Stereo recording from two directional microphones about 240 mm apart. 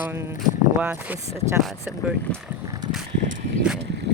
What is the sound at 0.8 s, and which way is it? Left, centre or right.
Speech, centre.